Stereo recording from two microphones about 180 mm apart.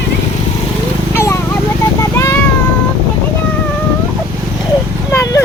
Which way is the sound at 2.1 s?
15° left (ahead or behind).